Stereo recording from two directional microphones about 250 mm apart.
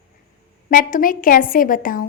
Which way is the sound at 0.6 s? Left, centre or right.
Left.